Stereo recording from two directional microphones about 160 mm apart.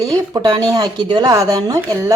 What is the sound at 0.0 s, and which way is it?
A woman's voice, 20° right (ahead or behind).